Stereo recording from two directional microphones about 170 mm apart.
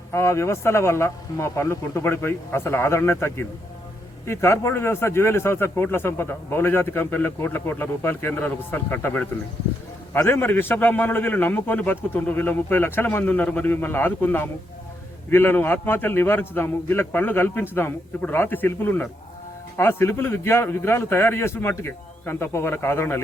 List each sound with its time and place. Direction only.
0.1 s speech: 15° left (ahead or behind)